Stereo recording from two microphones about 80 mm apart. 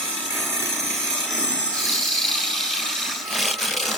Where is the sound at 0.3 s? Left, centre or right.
Centre.